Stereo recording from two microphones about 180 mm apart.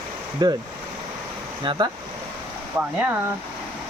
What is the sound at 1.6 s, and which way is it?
Speech, 25° right (ahead or behind).